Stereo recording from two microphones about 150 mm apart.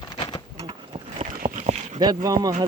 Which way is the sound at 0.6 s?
40° right (ahead or behind).